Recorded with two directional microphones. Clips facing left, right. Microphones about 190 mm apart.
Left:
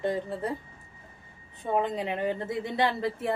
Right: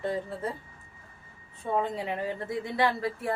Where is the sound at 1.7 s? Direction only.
20° left (ahead or behind).